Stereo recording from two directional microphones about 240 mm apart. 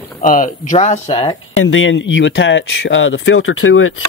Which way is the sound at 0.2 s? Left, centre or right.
Left.